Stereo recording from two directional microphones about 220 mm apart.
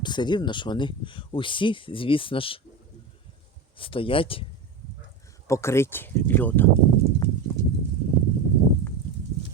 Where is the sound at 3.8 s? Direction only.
25° left (ahead or behind).